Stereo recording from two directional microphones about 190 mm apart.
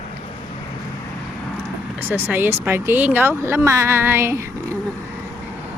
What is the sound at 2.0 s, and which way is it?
Speech, 10° right (ahead or behind).